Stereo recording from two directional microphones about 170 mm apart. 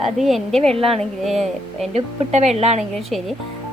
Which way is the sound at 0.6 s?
35° right (ahead or behind).